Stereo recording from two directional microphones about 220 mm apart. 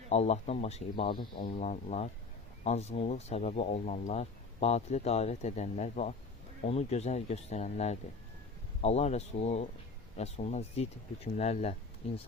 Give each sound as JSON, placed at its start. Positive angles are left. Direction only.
{"t": 0.1, "sound": "speech", "side_deg": 30}